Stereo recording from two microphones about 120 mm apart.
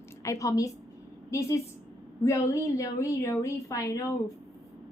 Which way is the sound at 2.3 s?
25° left (ahead or behind).